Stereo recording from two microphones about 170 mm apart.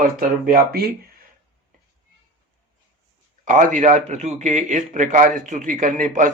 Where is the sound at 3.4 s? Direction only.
45° right (ahead or behind).